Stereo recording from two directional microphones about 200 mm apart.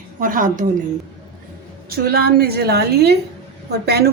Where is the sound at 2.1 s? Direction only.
50° right (ahead or behind).